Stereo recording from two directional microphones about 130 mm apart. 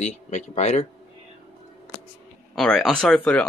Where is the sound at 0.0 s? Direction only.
60° left (ahead or behind).